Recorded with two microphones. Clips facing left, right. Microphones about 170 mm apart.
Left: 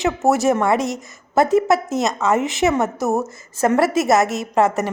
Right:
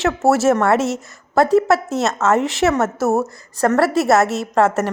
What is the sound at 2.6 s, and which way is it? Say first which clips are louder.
A woman's voice: right 1 dB; 15° left (ahead or behind).